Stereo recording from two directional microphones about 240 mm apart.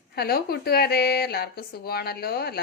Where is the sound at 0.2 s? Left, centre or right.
Left.